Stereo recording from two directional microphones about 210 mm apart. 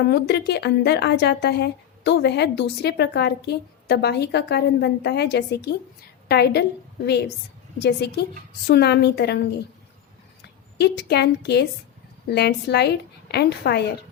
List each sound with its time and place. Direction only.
0.1 s speech: 50° left (ahead or behind)
10.8 s speech: 50° left (ahead or behind)